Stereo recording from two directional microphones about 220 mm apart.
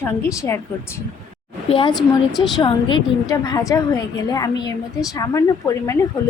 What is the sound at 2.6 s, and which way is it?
A woman's voice, 20° left (ahead or behind).